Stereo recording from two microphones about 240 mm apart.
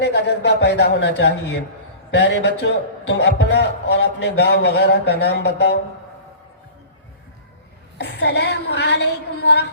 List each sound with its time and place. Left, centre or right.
0.0 s a man's voice: left
7.9 s a man's voice: left